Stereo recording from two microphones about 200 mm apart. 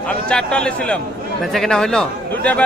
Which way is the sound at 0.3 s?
5° left (ahead or behind).